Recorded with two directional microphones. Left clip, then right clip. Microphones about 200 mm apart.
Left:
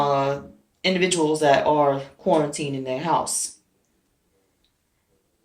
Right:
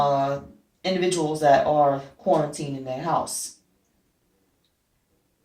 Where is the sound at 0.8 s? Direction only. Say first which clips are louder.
Left 3 dB; 20° left (ahead or behind).